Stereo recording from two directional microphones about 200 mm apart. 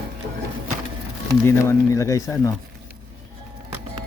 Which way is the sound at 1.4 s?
15° left (ahead or behind).